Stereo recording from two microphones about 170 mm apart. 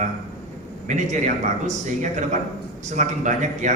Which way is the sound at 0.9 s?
45° right (ahead or behind).